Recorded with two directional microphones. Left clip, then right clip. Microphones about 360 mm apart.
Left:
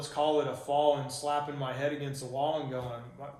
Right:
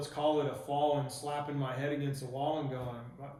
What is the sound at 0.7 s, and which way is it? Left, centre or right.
Speech, left.